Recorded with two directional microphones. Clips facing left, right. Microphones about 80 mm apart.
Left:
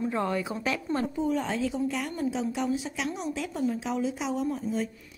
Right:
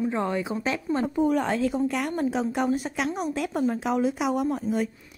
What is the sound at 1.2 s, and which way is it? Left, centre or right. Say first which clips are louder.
A woman's voice: right 7 dB; right.